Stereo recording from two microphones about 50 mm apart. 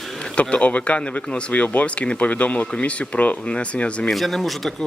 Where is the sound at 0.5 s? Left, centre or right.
Left.